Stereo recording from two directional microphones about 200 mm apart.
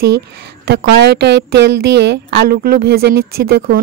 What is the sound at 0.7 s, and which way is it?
Speech, 55° right (ahead or behind).